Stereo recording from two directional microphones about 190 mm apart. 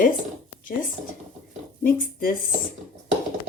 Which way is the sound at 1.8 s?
50° left (ahead or behind).